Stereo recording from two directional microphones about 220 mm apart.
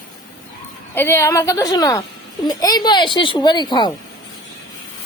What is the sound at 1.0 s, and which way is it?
Speech, 10° left (ahead or behind).